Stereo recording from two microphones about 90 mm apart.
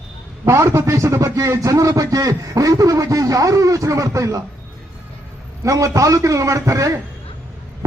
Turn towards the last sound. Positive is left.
turn(degrees=-35)  # may be behind; listen again after turning